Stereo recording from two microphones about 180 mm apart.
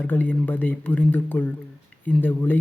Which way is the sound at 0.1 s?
10° left (ahead or behind).